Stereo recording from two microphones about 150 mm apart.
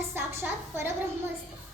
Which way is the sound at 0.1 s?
15° right (ahead or behind).